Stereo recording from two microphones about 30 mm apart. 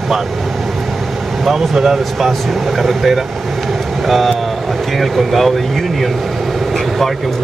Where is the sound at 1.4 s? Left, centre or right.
Centre.